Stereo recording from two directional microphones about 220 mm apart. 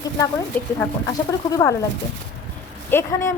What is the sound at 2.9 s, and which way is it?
Speech, 10° left (ahead or behind).